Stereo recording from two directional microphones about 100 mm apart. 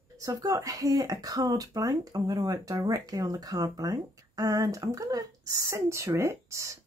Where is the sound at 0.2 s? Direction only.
35° right (ahead or behind).